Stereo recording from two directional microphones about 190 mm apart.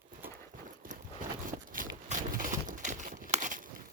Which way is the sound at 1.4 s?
45° right (ahead or behind).